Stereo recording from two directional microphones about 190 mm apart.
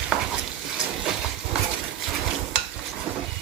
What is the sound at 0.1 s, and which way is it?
Stir, 5° right (ahead or behind).